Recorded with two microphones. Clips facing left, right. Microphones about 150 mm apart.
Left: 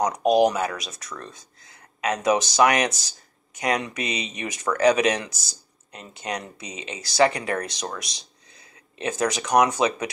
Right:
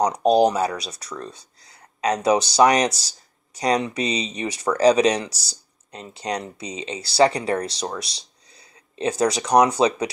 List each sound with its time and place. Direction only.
0.0 s speech: 30° right (ahead or behind)